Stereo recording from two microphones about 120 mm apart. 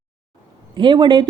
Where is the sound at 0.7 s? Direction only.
40° right (ahead or behind).